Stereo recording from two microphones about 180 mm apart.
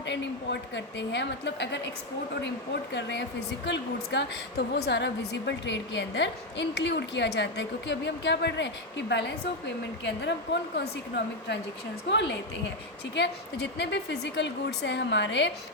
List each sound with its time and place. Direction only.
0.0 s a woman's voice: 80° left
2.9 s a woman's voice: 75° left (ahead or behind)
12.0 s a woman's voice: 75° left (ahead or behind)